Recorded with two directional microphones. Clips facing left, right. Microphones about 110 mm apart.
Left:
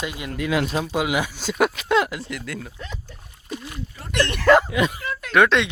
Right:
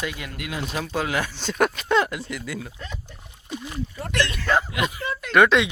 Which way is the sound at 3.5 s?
25° right (ahead or behind).